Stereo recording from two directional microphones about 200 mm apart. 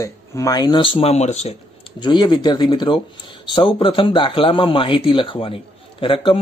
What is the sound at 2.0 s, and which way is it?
Speech, 20° left (ahead or behind).